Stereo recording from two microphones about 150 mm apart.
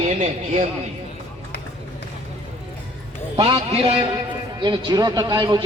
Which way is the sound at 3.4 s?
35° right (ahead or behind).